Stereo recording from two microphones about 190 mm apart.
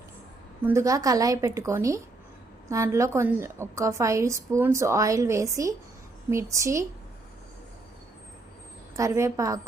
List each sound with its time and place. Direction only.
0.6 s a woman's voice: 15° right (ahead or behind)
9.0 s a woman's voice: 15° right (ahead or behind)